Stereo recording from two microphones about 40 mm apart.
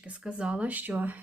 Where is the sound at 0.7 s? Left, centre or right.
Right.